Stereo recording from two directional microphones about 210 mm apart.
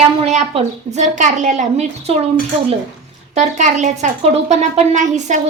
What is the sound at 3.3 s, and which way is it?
Speech, 35° right (ahead or behind).